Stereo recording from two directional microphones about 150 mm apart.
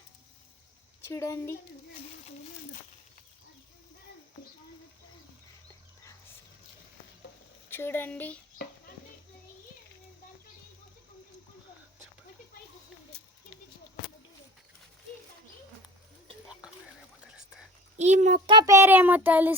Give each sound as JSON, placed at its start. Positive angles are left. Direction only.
{"t": 1.0, "sound": "a woman's voice", "side_deg": 20}
{"t": 7.7, "sound": "a woman's voice", "side_deg": 15}
{"t": 13.1, "sound": "a sound", "side_deg": 5}
{"t": 17.9, "sound": "a child's voice", "side_deg": -50}
{"t": 18.6, "sound": "speech", "side_deg": -20}